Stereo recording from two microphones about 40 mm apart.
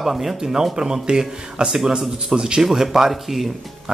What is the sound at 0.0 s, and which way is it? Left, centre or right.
Speech, centre.